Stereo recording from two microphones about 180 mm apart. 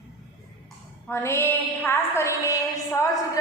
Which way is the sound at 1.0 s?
15° left (ahead or behind).